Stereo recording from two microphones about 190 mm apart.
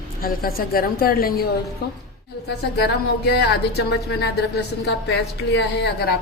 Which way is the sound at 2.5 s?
60° left (ahead or behind).